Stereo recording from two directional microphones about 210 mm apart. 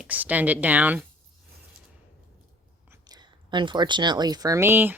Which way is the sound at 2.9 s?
20° right (ahead or behind).